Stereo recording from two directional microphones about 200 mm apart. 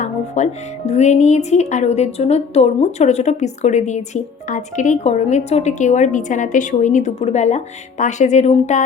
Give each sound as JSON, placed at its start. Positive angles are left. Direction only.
{"t": 0.0, "sound": "speech", "side_deg": 35}